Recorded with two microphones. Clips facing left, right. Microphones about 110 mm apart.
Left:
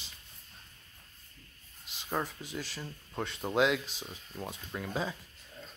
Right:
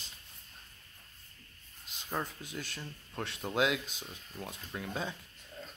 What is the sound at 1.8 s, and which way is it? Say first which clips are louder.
Speech: left 3 dB; 5° left (ahead or behind).